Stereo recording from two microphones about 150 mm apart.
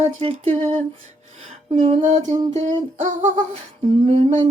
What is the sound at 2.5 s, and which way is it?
Humming, 50° right (ahead or behind).